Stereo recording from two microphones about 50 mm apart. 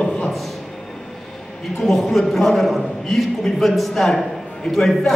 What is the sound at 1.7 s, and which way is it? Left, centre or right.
A man's voice, centre.